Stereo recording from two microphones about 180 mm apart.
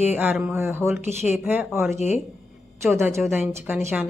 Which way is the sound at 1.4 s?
10° right (ahead or behind).